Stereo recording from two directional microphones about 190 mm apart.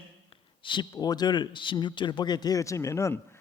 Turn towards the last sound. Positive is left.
turn(degrees=15)  # may be behind; listen again after turning